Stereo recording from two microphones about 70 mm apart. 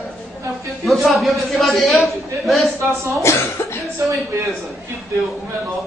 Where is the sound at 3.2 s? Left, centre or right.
Left.